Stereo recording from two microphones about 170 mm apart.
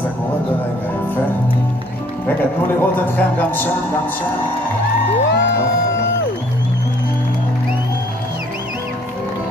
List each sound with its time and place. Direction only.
2.8 s speech: 10° left (ahead or behind)
5.2 s music: 90° left